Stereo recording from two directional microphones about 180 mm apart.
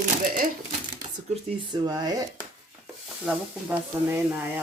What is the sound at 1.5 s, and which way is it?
Speech, 25° right (ahead or behind).